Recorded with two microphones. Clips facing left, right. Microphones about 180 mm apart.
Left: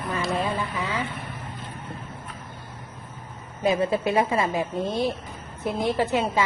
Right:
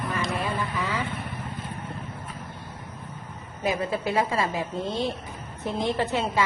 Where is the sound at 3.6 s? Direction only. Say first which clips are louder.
Left 4 dB; 25° left (ahead or behind).